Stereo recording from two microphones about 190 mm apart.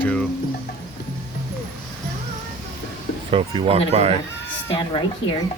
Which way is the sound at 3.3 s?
30° right (ahead or behind).